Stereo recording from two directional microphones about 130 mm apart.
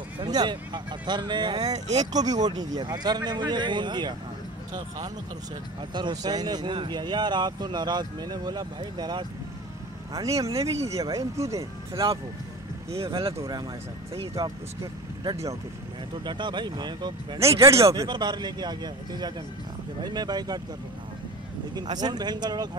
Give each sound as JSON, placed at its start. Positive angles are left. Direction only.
{"t": 0.2, "sound": "speech", "side_deg": -35}
{"t": 17.6, "sound": "speech", "side_deg": -25}
{"t": 18.0, "sound": "speech", "side_deg": -35}
{"t": 21.7, "sound": "speech", "side_deg": -30}